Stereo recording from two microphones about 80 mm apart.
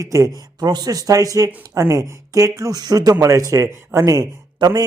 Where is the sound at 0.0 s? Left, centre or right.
Right.